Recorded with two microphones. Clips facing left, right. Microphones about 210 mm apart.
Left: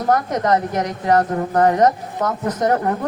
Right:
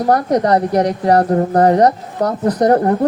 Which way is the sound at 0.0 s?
35° right (ahead or behind).